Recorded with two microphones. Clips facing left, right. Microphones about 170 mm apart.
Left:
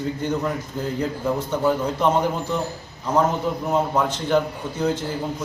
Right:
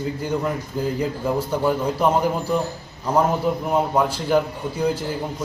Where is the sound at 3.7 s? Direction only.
10° right (ahead or behind).